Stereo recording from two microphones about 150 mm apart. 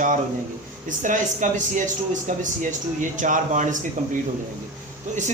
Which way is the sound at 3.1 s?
60° right (ahead or behind).